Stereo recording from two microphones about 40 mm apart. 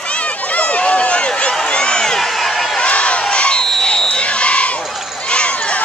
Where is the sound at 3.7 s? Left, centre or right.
Centre.